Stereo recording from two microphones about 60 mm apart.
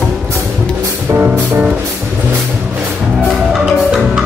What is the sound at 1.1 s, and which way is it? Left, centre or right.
Music, right.